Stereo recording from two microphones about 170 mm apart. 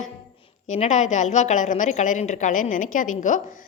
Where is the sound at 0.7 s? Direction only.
45° left (ahead or behind).